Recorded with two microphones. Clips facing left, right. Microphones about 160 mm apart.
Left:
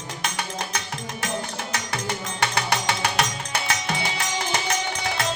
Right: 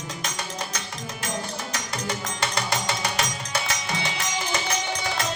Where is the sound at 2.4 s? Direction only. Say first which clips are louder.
Left 4 dB; 65° left (ahead or behind).